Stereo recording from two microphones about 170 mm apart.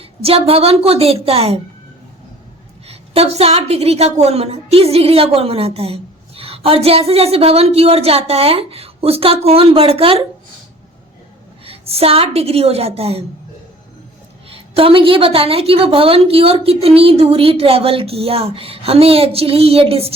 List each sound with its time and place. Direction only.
0.0 s a woman's voice: 35° right (ahead or behind)
2.8 s a woman's voice: 35° right (ahead or behind)
11.6 s a woman's voice: 35° right (ahead or behind)
14.5 s a woman's voice: 35° right (ahead or behind)